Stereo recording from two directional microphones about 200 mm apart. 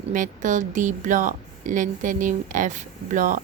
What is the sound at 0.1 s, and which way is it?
Speech, 40° right (ahead or behind).